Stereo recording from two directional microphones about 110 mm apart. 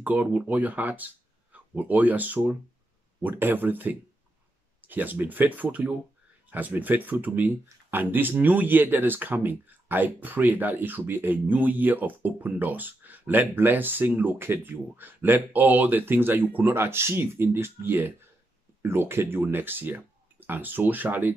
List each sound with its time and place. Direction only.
0.0 s speech: 15° right (ahead or behind)